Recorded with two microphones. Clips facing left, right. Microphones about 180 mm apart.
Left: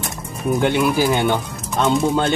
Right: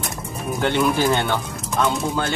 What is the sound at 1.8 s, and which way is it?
Speech, 25° left (ahead or behind).